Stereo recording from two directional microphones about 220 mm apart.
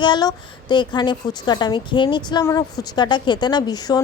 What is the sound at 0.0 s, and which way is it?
A woman's voice, 20° left (ahead or behind).